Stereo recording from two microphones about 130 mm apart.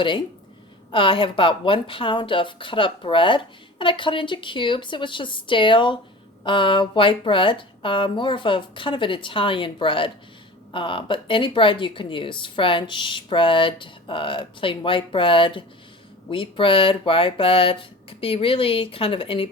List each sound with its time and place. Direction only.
0.9 s speech: 40° left (ahead or behind)